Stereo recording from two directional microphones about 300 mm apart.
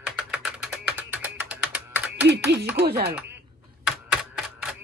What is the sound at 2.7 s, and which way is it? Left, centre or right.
Speech, right.